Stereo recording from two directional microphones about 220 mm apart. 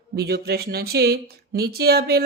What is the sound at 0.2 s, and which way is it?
Speech, 45° right (ahead or behind).